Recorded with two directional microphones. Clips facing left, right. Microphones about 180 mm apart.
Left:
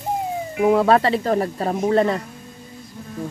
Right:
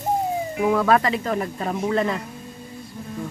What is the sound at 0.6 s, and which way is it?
Speech, 35° left (ahead or behind).